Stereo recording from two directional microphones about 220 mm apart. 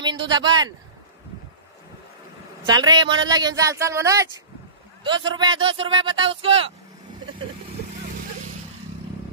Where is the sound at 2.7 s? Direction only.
20° right (ahead or behind).